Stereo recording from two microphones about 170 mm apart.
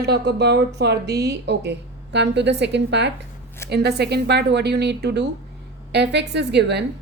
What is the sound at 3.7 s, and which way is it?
A woman's voice, 75° right (ahead or behind).